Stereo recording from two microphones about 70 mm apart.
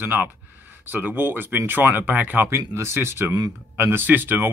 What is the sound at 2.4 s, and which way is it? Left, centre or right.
Speech, right.